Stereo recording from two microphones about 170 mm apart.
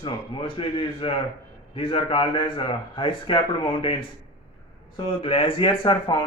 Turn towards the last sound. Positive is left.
turn(degrees=30)  # may be behind; listen again after turning